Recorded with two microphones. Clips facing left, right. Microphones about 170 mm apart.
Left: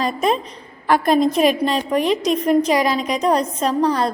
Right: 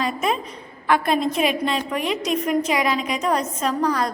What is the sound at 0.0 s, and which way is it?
A woman's voice, 35° left (ahead or behind).